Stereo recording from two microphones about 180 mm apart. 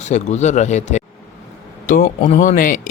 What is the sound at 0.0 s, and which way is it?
Speech, 40° left (ahead or behind).